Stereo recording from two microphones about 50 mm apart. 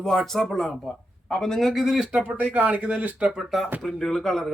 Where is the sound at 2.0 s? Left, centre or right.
Right.